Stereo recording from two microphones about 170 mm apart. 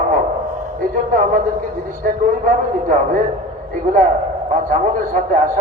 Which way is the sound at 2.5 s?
50° right (ahead or behind).